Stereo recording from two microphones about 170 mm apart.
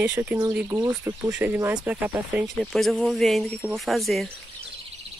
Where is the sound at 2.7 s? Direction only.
Centre (ahead or behind).